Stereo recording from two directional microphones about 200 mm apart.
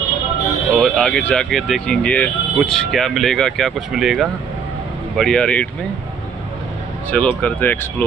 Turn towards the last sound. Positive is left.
turn(degrees=10)  # may be behind; listen again after turning